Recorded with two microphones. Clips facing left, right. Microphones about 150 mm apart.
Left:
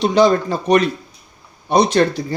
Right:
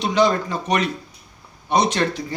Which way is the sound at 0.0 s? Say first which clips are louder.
Left 5 dB; 35° left (ahead or behind).